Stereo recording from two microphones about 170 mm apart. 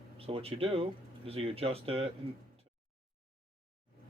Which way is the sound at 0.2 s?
35° right (ahead or behind).